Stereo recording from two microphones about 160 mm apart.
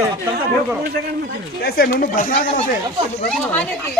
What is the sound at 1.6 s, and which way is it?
Speech, 70° left (ahead or behind).